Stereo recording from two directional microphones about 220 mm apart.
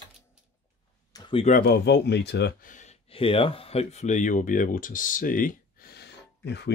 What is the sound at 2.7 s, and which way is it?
Speech, 30° left (ahead or behind).